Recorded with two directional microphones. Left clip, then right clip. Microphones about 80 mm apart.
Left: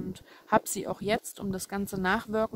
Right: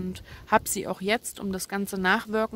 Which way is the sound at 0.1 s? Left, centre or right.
Left.